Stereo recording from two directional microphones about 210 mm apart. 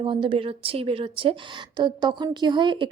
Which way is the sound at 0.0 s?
25° right (ahead or behind).